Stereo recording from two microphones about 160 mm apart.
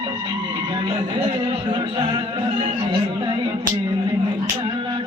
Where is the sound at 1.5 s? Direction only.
35° right (ahead or behind).